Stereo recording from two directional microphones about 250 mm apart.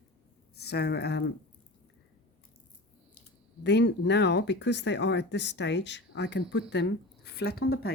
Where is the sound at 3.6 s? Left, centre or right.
Left.